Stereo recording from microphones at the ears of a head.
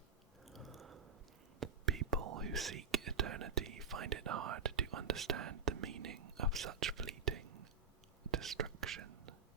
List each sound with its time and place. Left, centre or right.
0.8 s chewing: right
1.5 s whispering: right